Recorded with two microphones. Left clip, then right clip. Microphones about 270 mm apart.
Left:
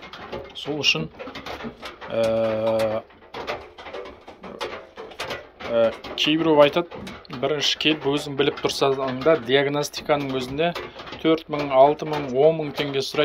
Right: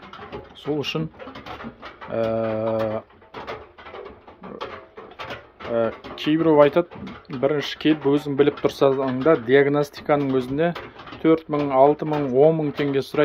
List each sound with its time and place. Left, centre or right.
2.1 s speech: right
5.7 s speech: right